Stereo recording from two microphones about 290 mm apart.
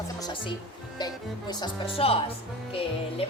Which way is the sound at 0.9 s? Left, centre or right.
Centre.